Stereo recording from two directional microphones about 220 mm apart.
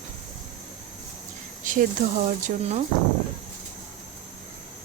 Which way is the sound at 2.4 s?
30° right (ahead or behind).